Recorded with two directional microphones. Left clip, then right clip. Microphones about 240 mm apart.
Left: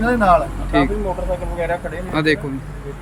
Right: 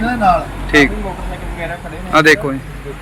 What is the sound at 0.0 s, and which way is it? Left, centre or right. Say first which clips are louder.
Vehicle: right 1 dB; left.